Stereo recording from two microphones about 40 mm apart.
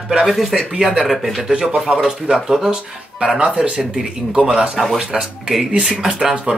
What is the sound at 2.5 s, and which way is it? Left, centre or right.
Speech, centre.